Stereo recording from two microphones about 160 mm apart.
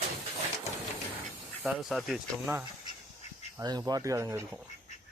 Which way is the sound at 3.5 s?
25° right (ahead or behind).